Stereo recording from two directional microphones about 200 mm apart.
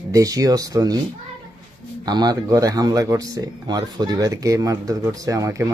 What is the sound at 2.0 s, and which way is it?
Speech, 20° right (ahead or behind).